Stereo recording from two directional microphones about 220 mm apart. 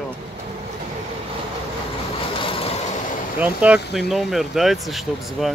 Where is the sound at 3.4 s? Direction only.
5° right (ahead or behind).